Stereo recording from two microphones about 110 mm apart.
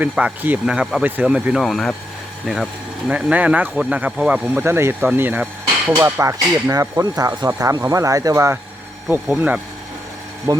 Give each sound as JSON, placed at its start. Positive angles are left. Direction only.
{"t": 0.0, "sound": "speech", "side_deg": -15}
{"t": 3.1, "sound": "speech", "side_deg": -10}
{"t": 4.6, "sound": "speech", "side_deg": -25}
{"t": 9.0, "sound": "speech", "side_deg": -10}
{"t": 10.5, "sound": "speech", "side_deg": -30}